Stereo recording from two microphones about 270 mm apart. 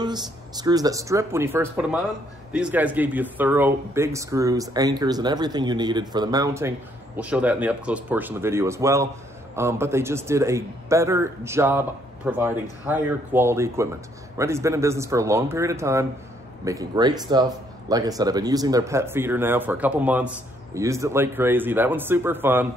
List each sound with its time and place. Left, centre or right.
0.0 s speech: centre